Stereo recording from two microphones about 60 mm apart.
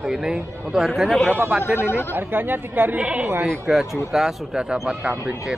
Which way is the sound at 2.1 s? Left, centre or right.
Right.